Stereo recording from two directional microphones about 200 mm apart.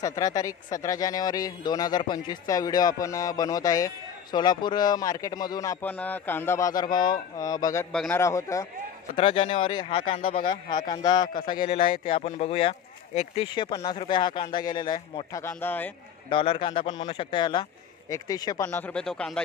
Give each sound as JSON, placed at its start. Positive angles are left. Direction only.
{"t": 0.0, "sound": "speech", "side_deg": 15}
{"t": 7.9, "sound": "speech", "side_deg": 5}
{"t": 8.2, "sound": "speech", "side_deg": 15}
{"t": 9.1, "sound": "speech", "side_deg": 30}
{"t": 16.3, "sound": "speech", "side_deg": 25}
{"t": 18.7, "sound": "speech", "side_deg": 5}